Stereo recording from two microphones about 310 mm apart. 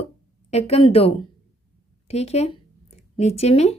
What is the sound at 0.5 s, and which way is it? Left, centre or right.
Speech, centre.